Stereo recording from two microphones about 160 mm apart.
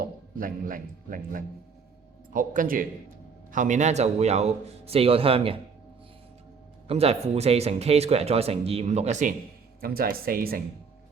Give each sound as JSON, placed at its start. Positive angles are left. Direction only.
{"t": 0.0, "sound": "speech", "side_deg": -60}
{"t": 6.8, "sound": "speech", "side_deg": -40}
{"t": 9.8, "sound": "speech", "side_deg": -70}